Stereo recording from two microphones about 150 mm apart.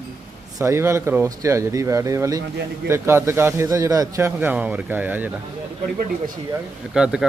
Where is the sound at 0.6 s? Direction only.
20° right (ahead or behind).